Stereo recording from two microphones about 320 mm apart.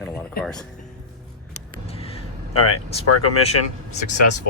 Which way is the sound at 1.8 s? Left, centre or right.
Centre.